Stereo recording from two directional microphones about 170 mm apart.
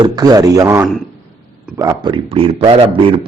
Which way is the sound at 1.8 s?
25° right (ahead or behind).